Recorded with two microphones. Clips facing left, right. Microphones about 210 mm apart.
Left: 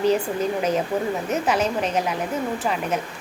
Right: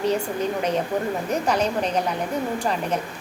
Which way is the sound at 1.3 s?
5° left (ahead or behind).